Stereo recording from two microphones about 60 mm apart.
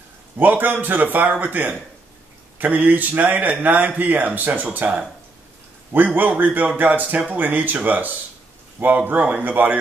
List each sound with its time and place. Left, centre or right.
0.4 s a man's voice: right